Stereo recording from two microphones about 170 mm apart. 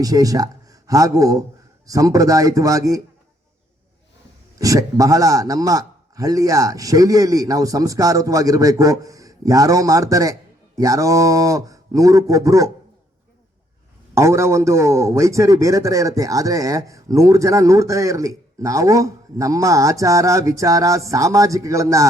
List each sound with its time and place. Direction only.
0.0 s a man's voice: 20° right (ahead or behind)
4.5 s a man's voice: 20° right (ahead or behind)
14.2 s a man's voice: 15° right (ahead or behind)